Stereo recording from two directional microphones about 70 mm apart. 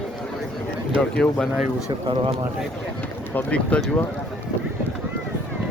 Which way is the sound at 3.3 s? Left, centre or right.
Left.